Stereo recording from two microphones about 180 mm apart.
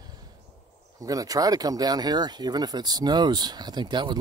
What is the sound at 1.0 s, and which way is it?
Speech, 20° right (ahead or behind).